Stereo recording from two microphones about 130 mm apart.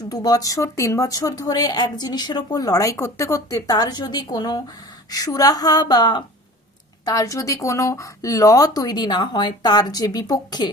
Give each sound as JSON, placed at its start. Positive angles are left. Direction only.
{"t": 0.1, "sound": "speech", "side_deg": 30}